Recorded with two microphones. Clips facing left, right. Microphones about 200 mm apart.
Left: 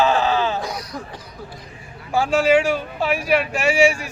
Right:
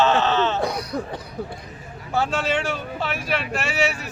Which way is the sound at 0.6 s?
60° right (ahead or behind).